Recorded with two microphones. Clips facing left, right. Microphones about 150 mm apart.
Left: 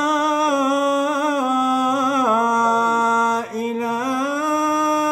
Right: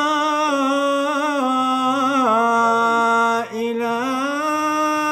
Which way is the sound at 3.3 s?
45° left (ahead or behind).